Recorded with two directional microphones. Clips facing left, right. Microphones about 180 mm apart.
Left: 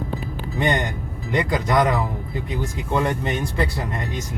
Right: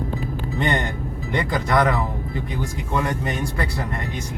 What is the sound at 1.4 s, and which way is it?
Speech, 15° left (ahead or behind).